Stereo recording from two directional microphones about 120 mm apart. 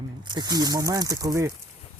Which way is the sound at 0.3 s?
35° right (ahead or behind).